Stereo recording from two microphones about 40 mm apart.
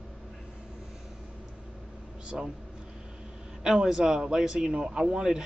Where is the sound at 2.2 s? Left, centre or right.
Right.